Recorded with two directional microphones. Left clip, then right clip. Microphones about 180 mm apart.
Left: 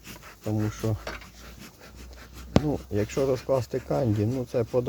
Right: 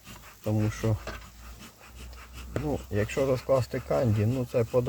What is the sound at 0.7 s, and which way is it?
Speech, 10° left (ahead or behind).